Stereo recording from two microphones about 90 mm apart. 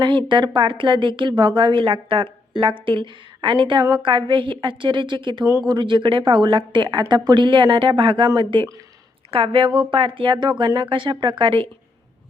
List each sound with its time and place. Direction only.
0.0 s a woman's voice: 65° right (ahead or behind)
9.3 s a woman's voice: 90° right; by 10.7 s 60° right (ahead or behind)
10.8 s a woman's voice: 75° right (ahead or behind)